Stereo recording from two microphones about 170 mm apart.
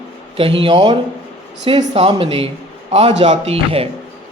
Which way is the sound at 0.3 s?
30° right (ahead or behind).